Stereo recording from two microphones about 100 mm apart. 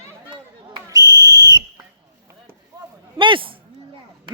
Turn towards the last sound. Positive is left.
turn(degrees=-55)  # may be behind; listen again after turning